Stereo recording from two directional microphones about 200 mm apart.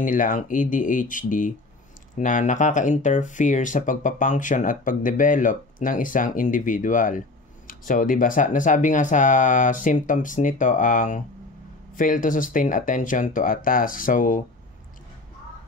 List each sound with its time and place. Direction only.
0.0 s speech: 40° left (ahead or behind)